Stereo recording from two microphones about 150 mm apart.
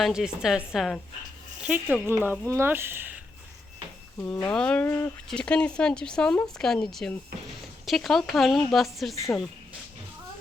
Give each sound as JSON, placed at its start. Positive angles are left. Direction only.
{"t": 0.0, "sound": "a woman's voice", "side_deg": -5}
{"t": 4.4, "sound": "a woman's voice", "side_deg": 5}